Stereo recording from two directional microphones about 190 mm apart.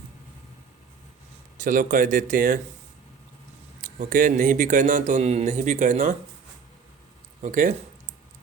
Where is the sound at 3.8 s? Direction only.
45° right (ahead or behind).